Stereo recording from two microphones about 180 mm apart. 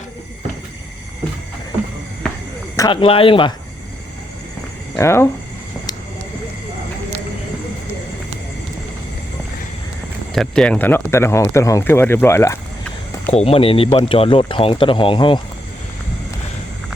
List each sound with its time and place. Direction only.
2.7 s speech: 25° left (ahead or behind)
4.9 s speech: 15° left (ahead or behind)
10.3 s speech: 5° left (ahead or behind)
13.3 s speech: 35° left (ahead or behind)